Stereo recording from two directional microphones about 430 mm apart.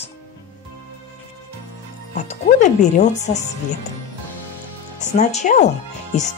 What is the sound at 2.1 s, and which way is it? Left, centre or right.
Speech, centre.